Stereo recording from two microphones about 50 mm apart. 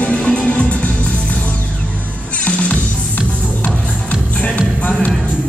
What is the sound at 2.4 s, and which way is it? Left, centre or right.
Music, left.